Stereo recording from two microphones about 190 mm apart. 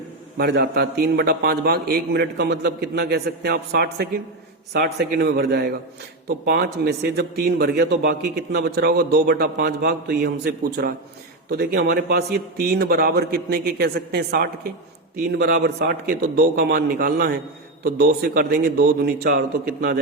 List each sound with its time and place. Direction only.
0.3 s a man's voice: 60° right (ahead or behind)